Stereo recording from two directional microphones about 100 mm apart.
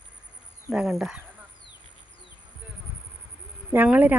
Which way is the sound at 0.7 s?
5° right (ahead or behind).